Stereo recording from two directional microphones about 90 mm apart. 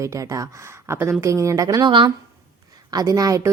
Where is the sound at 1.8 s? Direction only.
65° right (ahead or behind).